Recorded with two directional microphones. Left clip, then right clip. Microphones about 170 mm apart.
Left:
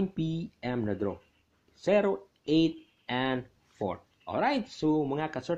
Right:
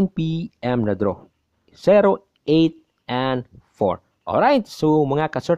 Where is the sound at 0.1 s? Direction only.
40° right (ahead or behind).